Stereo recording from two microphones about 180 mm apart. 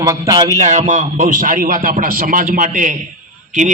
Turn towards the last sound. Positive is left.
turn(degrees=-45)  # may be behind; listen again after turning